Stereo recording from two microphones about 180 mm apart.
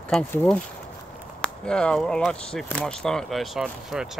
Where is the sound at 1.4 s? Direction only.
5° left (ahead or behind).